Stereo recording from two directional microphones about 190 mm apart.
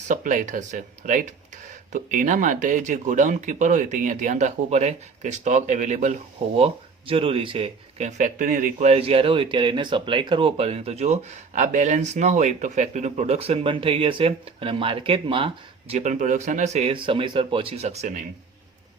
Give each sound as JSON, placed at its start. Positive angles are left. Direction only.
{"t": 0.1, "sound": "speech", "side_deg": -40}